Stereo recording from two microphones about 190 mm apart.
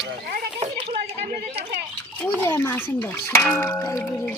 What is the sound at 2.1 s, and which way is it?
Speech, 10° left (ahead or behind).